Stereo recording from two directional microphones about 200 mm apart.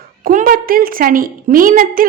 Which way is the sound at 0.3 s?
45° right (ahead or behind).